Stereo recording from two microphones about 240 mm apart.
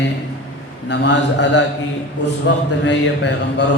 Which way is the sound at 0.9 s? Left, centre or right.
Left.